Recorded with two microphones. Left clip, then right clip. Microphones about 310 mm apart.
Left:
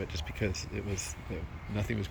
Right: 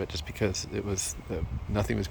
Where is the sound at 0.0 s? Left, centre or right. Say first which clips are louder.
Right 5 dB; centre.